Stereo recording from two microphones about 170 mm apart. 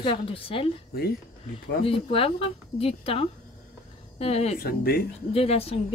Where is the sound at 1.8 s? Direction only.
35° left (ahead or behind).